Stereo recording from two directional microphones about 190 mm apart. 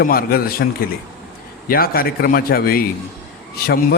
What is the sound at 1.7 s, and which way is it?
A man's voice, 50° left (ahead or behind).